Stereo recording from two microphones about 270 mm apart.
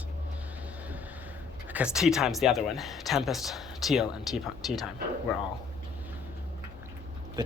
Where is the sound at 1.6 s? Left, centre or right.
Centre.